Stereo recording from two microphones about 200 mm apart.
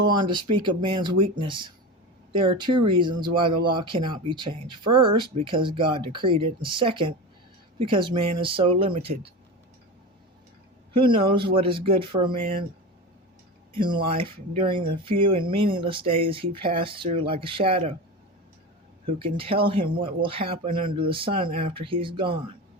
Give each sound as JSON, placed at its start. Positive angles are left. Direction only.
{"t": 0.0, "sound": "speech", "side_deg": -25}
{"t": 11.0, "sound": "speech", "side_deg": -25}
{"t": 13.7, "sound": "speech", "side_deg": -25}
{"t": 19.0, "sound": "speech", "side_deg": -25}